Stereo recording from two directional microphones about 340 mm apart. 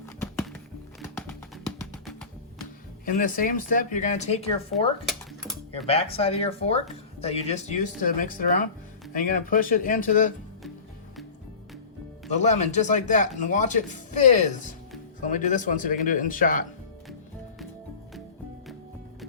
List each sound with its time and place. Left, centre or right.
0.0 s music: centre
3.1 s speech: left
5.8 s speech: centre
12.3 s speech: centre